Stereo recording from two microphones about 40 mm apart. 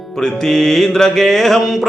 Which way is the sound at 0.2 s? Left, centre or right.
Centre.